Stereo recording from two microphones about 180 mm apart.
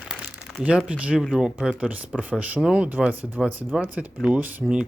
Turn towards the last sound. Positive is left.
turn(degrees=-5)  # may be behind; listen again after turning